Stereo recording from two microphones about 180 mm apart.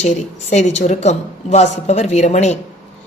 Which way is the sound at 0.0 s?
40° left (ahead or behind).